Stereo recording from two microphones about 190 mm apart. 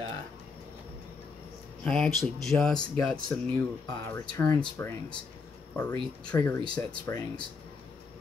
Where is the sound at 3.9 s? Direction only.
15° left (ahead or behind).